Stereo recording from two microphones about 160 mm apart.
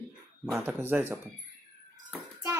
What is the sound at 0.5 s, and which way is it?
Speech, 10° right (ahead or behind).